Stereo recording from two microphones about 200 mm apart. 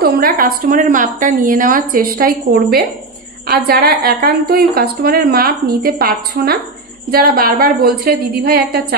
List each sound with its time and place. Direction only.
0.0 s a woman's voice: 45° right (ahead or behind)